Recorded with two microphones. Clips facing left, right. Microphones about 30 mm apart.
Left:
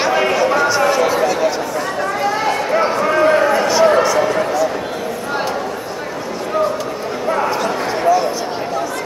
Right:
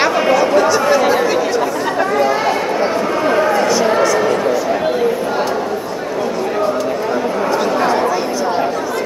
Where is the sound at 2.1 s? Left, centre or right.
Centre.